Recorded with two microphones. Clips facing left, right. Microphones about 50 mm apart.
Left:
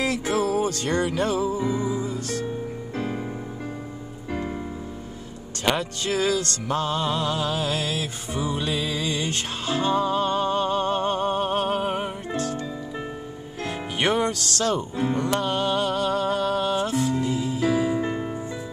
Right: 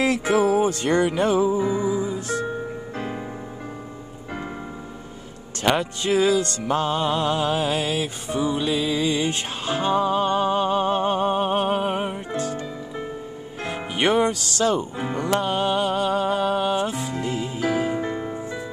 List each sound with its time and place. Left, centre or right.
0.0 s music: right
5.7 s music: centre
8.3 s music: centre
13.6 s music: centre
17.1 s music: right